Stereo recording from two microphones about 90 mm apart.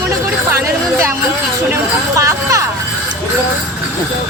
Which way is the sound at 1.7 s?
35° right (ahead or behind).